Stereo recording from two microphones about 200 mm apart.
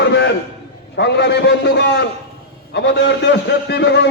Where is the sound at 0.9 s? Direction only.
60° left (ahead or behind).